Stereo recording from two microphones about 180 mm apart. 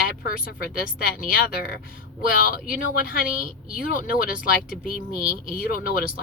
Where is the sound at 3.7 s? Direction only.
50° left (ahead or behind).